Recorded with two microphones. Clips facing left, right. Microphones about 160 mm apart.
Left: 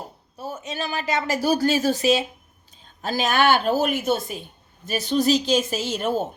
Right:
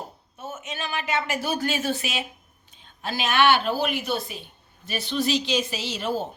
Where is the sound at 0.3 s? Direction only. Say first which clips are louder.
Left 4 dB; 35° left (ahead or behind).